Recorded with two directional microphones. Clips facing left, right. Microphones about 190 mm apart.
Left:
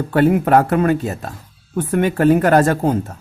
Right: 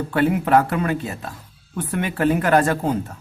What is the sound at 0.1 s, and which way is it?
Speech, 45° left (ahead or behind).